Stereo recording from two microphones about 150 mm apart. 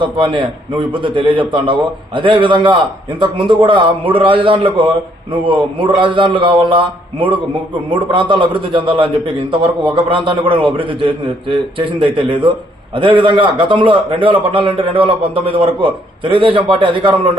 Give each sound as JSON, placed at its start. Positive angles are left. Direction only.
{"t": 0.0, "sound": "a man's voice", "side_deg": -35}